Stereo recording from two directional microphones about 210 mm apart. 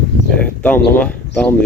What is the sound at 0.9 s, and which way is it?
Speech, 5° left (ahead or behind).